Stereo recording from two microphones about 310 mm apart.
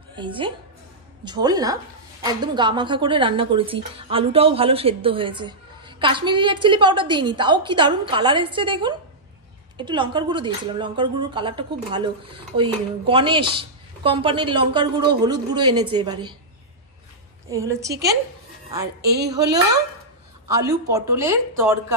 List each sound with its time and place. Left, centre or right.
0.1 s a woman's voice: centre
17.5 s a woman's voice: centre
20.4 s a woman's voice: centre